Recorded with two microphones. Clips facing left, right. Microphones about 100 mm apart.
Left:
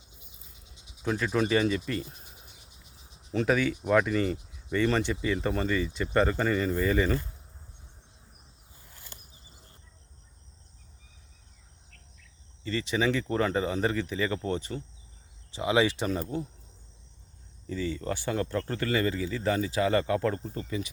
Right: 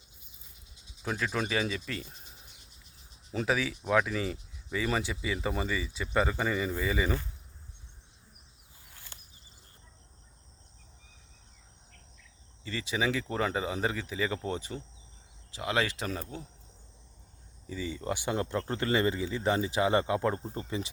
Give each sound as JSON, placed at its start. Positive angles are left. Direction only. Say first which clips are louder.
{"t": 1.0, "sound": "speech", "louder": "left 5 dB", "side_deg": 0}
{"t": 3.3, "sound": "speech", "louder": "left 4 dB", "side_deg": 0}
{"t": 12.6, "sound": "speech", "louder": "left 4 dB", "side_deg": -10}
{"t": 15.5, "sound": "speech", "louder": "left 6 dB", "side_deg": 5}
{"t": 17.7, "sound": "speech", "louder": "left 3 dB", "side_deg": -10}